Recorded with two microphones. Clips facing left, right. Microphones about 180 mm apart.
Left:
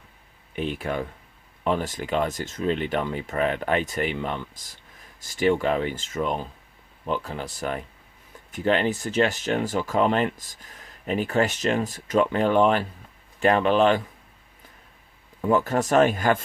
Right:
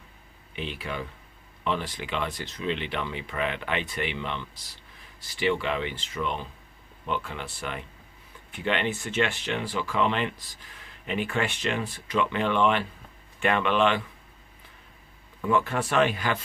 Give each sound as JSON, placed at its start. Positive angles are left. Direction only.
{"t": 0.5, "sound": "speech", "side_deg": 50}
{"t": 15.4, "sound": "speech", "side_deg": 40}